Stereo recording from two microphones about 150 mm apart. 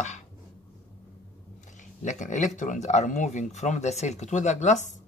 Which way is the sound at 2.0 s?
55° left (ahead or behind).